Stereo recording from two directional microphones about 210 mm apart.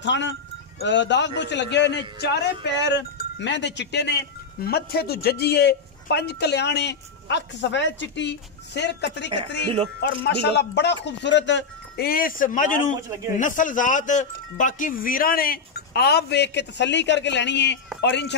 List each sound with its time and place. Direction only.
0.0 s speech: 60° left (ahead or behind)